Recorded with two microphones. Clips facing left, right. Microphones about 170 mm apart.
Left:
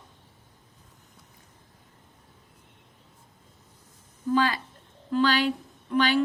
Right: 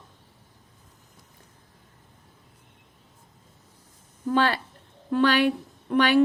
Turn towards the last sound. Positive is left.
turn(degrees=-60)  # may be behind; listen again after turning